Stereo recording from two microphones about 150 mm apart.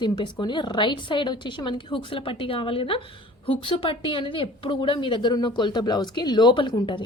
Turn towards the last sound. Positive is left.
turn(degrees=30)  # may be behind; listen again after turning